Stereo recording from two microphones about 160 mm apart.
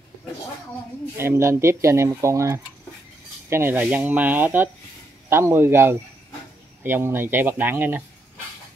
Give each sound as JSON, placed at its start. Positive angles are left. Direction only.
{"t": 1.1, "sound": "speech", "side_deg": -15}